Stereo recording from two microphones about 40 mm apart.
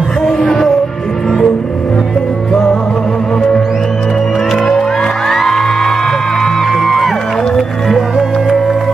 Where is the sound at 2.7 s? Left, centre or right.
Centre.